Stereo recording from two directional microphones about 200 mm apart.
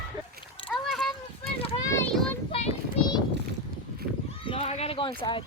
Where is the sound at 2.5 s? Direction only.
30° left (ahead or behind).